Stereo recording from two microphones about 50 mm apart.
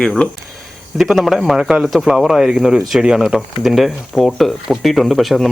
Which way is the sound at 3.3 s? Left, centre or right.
Centre.